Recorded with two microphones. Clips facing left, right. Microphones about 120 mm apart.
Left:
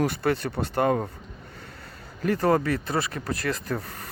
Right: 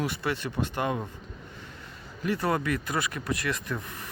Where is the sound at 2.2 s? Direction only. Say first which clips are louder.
Left 5 dB; 40° left (ahead or behind).